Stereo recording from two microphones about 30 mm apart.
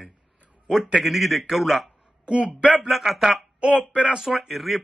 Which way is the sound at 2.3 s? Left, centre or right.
Right.